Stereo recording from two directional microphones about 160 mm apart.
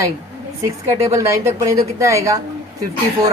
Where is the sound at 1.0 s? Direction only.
20° right (ahead or behind).